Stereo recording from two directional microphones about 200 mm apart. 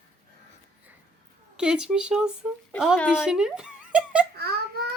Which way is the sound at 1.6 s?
5° right (ahead or behind).